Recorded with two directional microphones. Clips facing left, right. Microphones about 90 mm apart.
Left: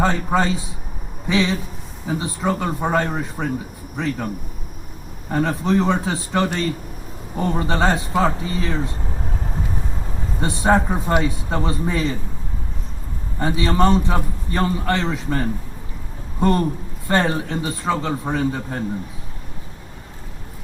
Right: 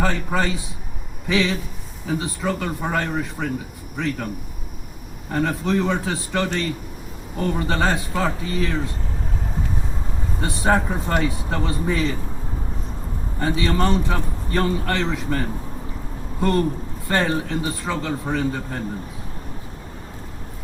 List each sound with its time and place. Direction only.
0.0 s a man's voice: 20° left (ahead or behind)
5.3 s a man's voice: 20° left (ahead or behind)
10.4 s a man's voice: 20° left (ahead or behind)
13.4 s a man's voice: 20° left (ahead or behind)